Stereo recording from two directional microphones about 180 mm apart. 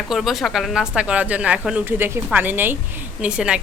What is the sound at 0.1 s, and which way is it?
Speech, centre (ahead or behind).